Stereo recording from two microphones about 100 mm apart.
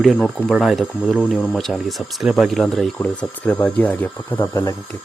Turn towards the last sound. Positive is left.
turn(degrees=20)  # may be behind; listen again after turning